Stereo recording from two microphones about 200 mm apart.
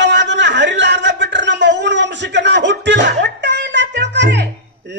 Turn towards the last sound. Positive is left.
turn(degrees=-60)  # may be behind; listen again after turning